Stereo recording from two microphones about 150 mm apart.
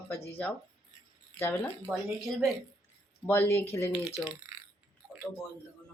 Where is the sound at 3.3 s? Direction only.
15° left (ahead or behind).